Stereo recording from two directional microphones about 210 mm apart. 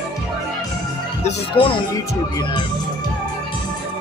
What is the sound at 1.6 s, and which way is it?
Speech, 25° left (ahead or behind).